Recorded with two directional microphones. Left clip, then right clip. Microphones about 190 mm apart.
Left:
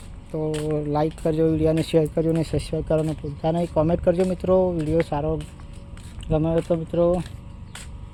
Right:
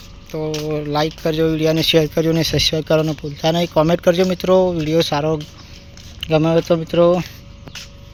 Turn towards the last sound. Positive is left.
turn(degrees=-15)  # may be behind; listen again after turning